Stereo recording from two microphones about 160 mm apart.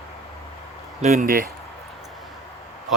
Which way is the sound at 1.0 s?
55° right (ahead or behind).